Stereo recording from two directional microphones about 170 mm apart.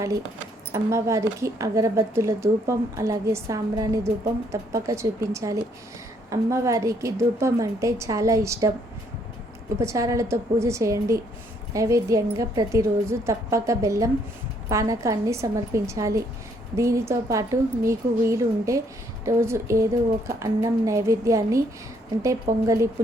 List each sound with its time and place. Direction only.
0.7 s speech: 15° right (ahead or behind)
9.7 s speech: 15° right (ahead or behind)
22.6 s speech: 20° right (ahead or behind)